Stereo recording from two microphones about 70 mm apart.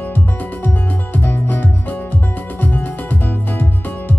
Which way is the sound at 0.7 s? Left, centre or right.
Left.